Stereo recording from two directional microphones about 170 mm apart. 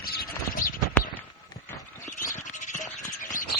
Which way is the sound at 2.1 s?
50° left (ahead or behind).